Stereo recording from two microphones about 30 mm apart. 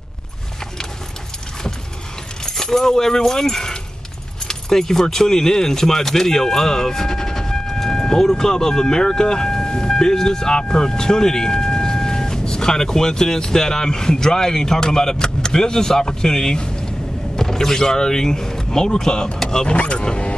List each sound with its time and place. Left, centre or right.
2.4 s speech: centre
17.4 s speech: centre
19.7 s speech: left
20.0 s speech: left